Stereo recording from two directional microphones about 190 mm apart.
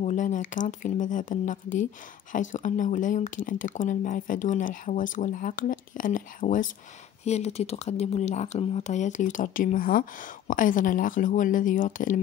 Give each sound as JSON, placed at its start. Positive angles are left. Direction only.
{"t": 0.0, "sound": "speech", "side_deg": 40}